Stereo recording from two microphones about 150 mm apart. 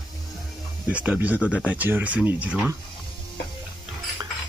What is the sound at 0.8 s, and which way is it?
Speech, 10° right (ahead or behind).